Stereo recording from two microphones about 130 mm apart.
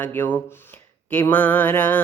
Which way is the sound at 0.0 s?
15° left (ahead or behind).